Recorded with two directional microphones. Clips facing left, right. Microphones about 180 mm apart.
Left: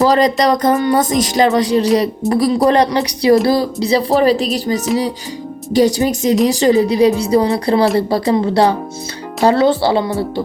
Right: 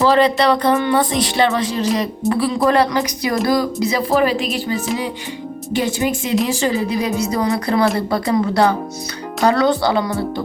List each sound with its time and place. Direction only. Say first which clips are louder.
0.0 s music: left 2 dB; 40° left (ahead or behind)
7.9 s speech: left 4 dB; 30° left (ahead or behind)